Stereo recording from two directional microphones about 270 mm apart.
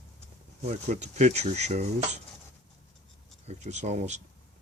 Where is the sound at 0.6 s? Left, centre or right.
Right.